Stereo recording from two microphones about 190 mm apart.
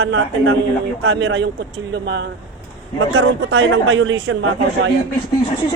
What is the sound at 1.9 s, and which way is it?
A man's voice, 65° right (ahead or behind).